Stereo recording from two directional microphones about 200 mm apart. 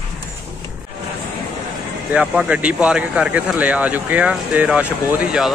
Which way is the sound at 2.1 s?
5° right (ahead or behind).